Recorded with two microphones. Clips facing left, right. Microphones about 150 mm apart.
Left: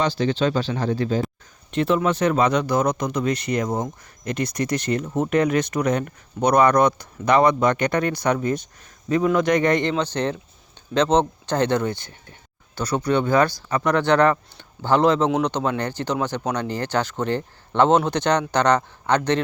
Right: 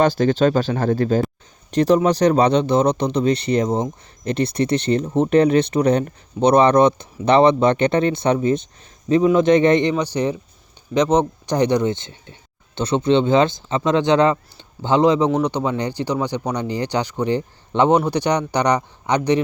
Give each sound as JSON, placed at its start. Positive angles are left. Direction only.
{"t": 0.0, "sound": "speech", "side_deg": -45}
{"t": 9.9, "sound": "speech", "side_deg": -10}